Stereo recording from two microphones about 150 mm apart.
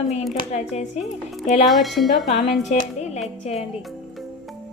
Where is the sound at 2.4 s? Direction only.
45° left (ahead or behind).